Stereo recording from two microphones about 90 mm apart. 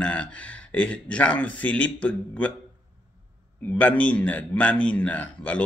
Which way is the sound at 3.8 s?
15° left (ahead or behind).